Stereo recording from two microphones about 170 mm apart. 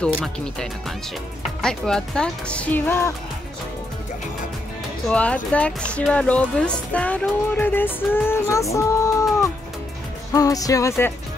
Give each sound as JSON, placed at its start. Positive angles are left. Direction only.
{"t": 0.0, "sound": "speech", "side_deg": 5}
{"t": 5.0, "sound": "speech", "side_deg": 5}
{"t": 10.3, "sound": "speech", "side_deg": 20}